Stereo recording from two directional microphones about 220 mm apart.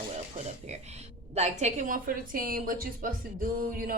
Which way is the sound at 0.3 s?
30° right (ahead or behind).